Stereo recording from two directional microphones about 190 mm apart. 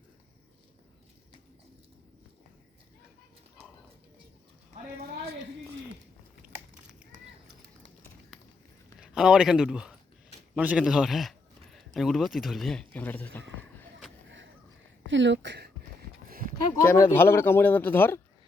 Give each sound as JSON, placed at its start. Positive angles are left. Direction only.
{"t": 9.0, "sound": "a man's voice", "side_deg": -5}
{"t": 10.5, "sound": "a sound", "side_deg": -5}
{"t": 11.9, "sound": "speech", "side_deg": 0}
{"t": 15.0, "sound": "speech", "side_deg": -75}
{"t": 16.8, "sound": "speech", "side_deg": 10}